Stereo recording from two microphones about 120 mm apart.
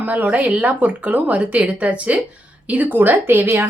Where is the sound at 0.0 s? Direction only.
15° right (ahead or behind).